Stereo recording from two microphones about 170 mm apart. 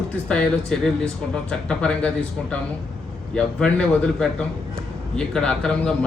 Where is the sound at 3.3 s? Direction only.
5° left (ahead or behind).